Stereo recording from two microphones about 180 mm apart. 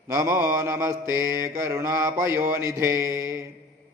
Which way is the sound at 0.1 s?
15° right (ahead or behind).